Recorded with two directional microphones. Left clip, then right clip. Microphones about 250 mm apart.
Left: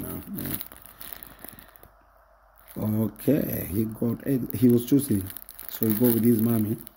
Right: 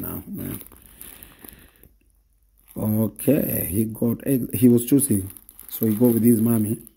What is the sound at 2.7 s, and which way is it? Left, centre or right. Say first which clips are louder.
Speech: right 4 dB; centre.